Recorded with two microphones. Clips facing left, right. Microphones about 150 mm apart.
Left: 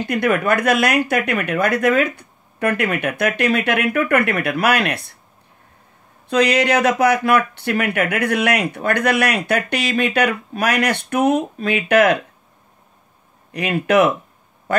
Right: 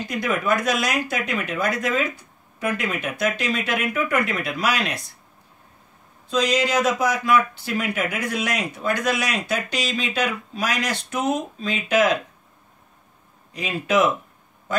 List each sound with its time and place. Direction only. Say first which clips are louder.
0.0 s speech: left 6 dB; 60° left (ahead or behind)
6.2 s speech: left 5 dB; 65° left (ahead or behind)
13.5 s speech: left 6 dB; 65° left (ahead or behind)